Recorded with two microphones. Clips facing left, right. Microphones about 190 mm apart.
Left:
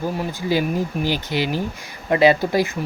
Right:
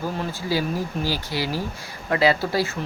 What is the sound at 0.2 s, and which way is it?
Speech, 20° left (ahead or behind).